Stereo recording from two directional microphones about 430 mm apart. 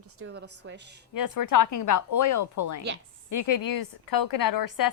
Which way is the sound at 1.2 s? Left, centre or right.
Left.